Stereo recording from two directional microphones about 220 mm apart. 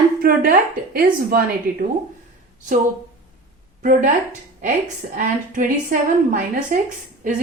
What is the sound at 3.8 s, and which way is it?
Speech, 35° right (ahead or behind).